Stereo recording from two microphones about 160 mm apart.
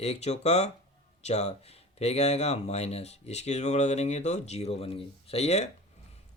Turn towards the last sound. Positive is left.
turn(degrees=40)  # may be behind; listen again after turning